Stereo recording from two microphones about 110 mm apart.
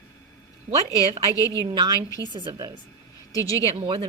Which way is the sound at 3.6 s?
55° right (ahead or behind).